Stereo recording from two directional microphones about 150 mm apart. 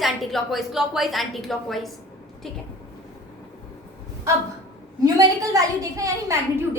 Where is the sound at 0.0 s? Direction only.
Centre (ahead or behind).